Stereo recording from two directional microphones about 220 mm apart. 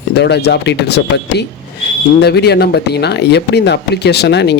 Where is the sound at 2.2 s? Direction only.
45° left (ahead or behind).